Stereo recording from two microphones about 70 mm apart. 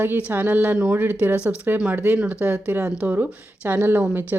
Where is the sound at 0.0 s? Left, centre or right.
Right.